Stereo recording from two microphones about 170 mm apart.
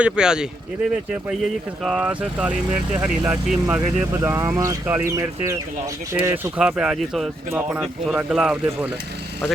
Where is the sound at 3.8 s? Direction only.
15° right (ahead or behind).